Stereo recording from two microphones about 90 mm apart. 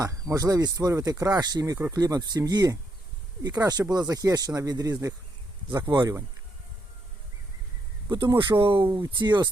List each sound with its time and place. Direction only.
0.0 s speech: 35° right (ahead or behind)
1.4 s speech: 50° right (ahead or behind)
8.1 s speech: 55° right (ahead or behind); by 8.9 s 75° right (ahead or behind)
9.0 s speech: 60° right (ahead or behind)